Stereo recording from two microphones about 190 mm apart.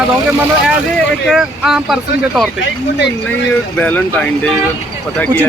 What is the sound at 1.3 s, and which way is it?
Speech, centre (ahead or behind).